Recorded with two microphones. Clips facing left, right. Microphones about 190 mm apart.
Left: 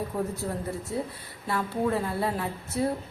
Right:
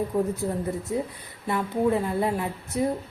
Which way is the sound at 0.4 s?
15° right (ahead or behind).